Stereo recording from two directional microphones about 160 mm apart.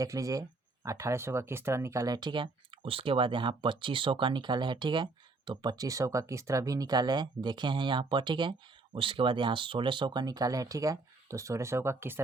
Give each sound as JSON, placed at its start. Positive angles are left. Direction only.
{"t": 0.0, "sound": "speech", "side_deg": -20}